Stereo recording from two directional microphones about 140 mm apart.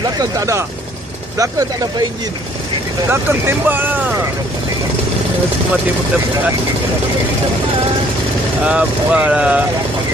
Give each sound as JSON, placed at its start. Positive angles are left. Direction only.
{"t": 0.2, "sound": "speech", "side_deg": -20}
{"t": 3.1, "sound": "speech", "side_deg": -15}
{"t": 8.6, "sound": "speech", "side_deg": -10}